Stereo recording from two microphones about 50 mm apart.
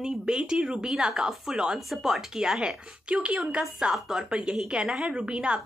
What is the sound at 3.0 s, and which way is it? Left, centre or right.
Speech, right.